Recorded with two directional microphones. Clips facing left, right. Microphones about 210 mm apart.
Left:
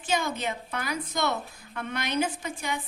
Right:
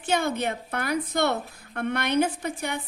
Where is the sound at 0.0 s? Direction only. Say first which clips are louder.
Right 3 dB; 60° right (ahead or behind).